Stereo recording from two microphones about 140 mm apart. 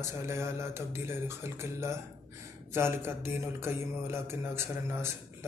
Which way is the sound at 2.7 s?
15° right (ahead or behind).